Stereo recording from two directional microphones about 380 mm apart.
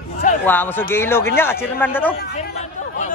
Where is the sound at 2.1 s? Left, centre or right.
Left.